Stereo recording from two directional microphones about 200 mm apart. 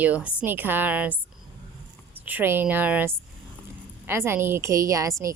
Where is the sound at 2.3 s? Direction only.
10° right (ahead or behind).